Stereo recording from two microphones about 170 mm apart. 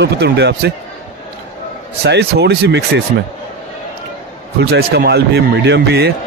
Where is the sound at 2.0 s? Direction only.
75° right (ahead or behind).